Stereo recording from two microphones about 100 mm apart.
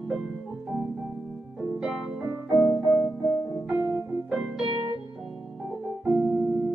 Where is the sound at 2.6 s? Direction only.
25° left (ahead or behind).